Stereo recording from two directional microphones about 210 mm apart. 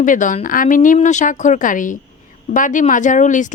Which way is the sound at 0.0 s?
40° left (ahead or behind).